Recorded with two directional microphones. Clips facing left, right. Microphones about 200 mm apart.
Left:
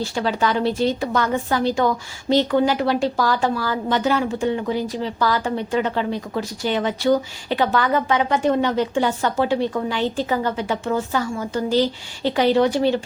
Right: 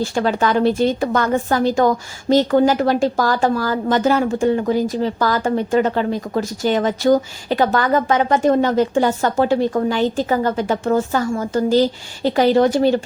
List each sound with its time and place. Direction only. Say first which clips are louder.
0.0 s a woman's voice: right 4 dB; 50° right (ahead or behind)